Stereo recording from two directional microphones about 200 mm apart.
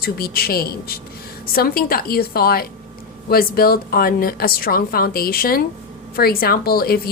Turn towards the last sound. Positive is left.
turn(degrees=50)  # may be behind; listen again after turning